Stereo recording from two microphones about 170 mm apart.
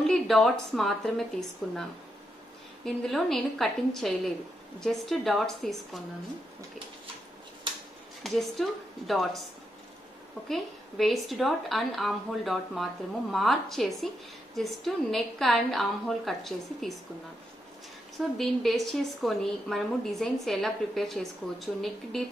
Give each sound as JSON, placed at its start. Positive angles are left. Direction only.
{"t": 0.0, "sound": "a woman's voice", "side_deg": 0}
{"t": 8.2, "sound": "a woman's voice", "side_deg": 0}
{"t": 10.5, "sound": "a woman's voice", "side_deg": 0}
{"t": 18.4, "sound": "a woman's voice", "side_deg": 0}